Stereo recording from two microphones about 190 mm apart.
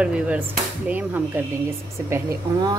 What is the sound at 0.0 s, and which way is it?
Speech, 5° right (ahead or behind).